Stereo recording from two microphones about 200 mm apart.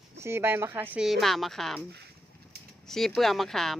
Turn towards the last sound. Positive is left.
turn(degrees=0)  # may be behind; listen again after turning